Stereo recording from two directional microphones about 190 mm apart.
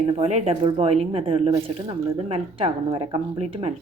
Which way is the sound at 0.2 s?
35° right (ahead or behind).